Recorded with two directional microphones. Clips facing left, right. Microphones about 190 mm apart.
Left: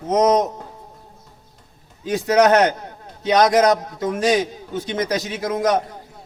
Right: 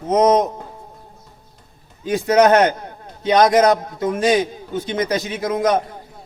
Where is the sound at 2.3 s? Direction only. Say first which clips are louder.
Right 1 dB; 25° right (ahead or behind).